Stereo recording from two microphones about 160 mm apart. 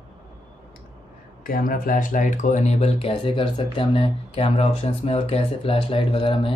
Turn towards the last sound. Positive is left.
turn(degrees=35)  # may be behind; listen again after turning